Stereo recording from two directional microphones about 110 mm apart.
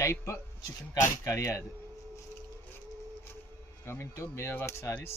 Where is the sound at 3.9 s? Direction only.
25° left (ahead or behind).